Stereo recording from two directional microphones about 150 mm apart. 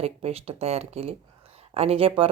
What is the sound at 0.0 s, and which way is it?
A woman's voice, 40° right (ahead or behind).